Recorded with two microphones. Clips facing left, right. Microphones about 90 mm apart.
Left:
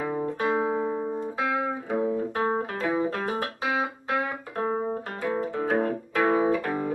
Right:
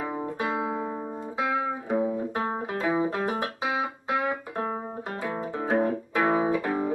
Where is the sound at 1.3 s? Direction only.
15° right (ahead or behind).